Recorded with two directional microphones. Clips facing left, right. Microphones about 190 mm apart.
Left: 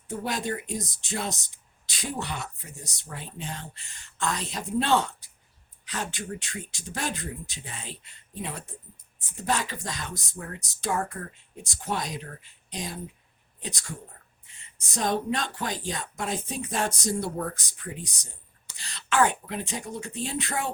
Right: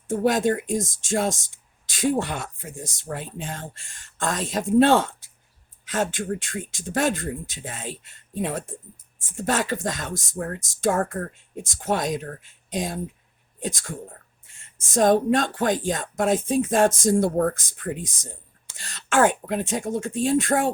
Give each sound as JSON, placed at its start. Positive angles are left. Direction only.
{"t": 0.1, "sound": "speech", "side_deg": -45}
{"t": 2.6, "sound": "speech", "side_deg": -90}
{"t": 2.9, "sound": "speech", "side_deg": -50}